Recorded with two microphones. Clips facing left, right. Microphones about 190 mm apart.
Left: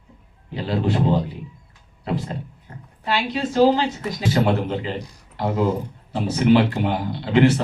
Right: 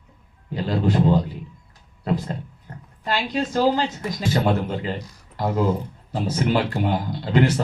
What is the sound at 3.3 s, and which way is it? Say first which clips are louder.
Speech: left 3 dB; 45° right (ahead or behind).